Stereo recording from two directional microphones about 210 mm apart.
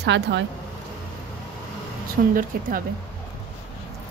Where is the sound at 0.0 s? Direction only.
55° right (ahead or behind).